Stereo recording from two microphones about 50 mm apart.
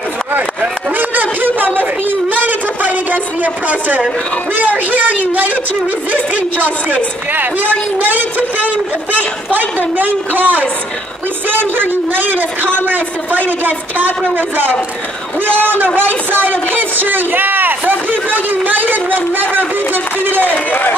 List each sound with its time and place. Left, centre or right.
0.9 s a sound: right
4.6 s a woman's voice: right
20.5 s a man's voice: left